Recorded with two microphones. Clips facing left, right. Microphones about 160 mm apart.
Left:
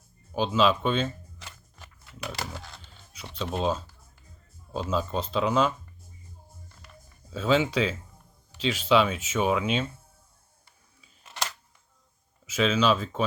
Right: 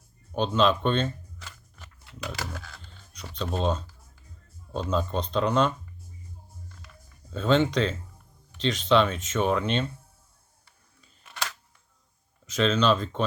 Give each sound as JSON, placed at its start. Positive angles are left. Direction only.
{"t": 0.3, "sound": "speech", "side_deg": 5}
{"t": 2.2, "sound": "a sound", "side_deg": 15}
{"t": 3.3, "sound": "speech", "side_deg": 5}
{"t": 7.3, "sound": "speech", "side_deg": 5}
{"t": 12.5, "sound": "speech", "side_deg": 5}